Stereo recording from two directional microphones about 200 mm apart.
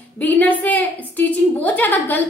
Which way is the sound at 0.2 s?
10° left (ahead or behind).